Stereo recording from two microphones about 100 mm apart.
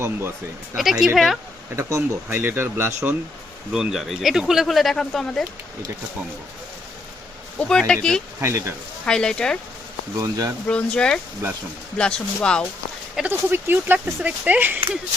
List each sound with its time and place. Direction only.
0.0 s speech: 25° right (ahead or behind)
0.8 s speech: 5° right (ahead or behind)
1.7 s speech: 30° right (ahead or behind)
3.7 s speech: 5° right (ahead or behind)
7.6 s speech: 5° left (ahead or behind)
8.4 s speech: 25° right (ahead or behind)
9.0 s speech: 10° left (ahead or behind)
10.2 s speech: 35° right (ahead or behind)
10.7 s speech: 10° left (ahead or behind)
13.2 s speech: 20° right (ahead or behind)